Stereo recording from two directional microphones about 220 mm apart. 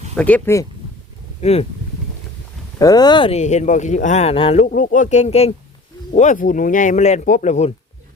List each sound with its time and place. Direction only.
0.2 s speech: 5° left (ahead or behind)
1.4 s speech: 30° left (ahead or behind)
2.7 s speech: 15° left (ahead or behind); by 7.7 s 30° left (ahead or behind)